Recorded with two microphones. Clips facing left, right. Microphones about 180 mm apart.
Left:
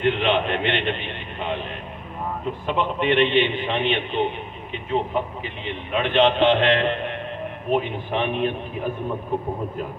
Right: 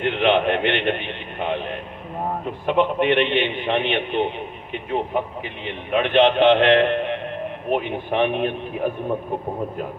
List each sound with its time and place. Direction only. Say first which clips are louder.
0.0 s speech: right 2 dB; 55° right (ahead or behind)